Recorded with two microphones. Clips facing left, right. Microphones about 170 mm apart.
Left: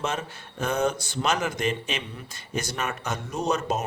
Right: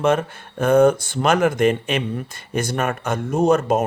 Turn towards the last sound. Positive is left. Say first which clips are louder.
# right 9 dB
turn(degrees=-55)  # may be behind; listen again after turning